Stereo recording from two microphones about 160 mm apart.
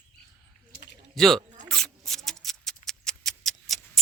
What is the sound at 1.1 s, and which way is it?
Speech, centre (ahead or behind).